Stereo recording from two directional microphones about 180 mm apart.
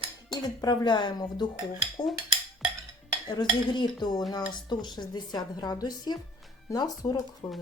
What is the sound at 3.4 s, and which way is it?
Speech, 25° left (ahead or behind).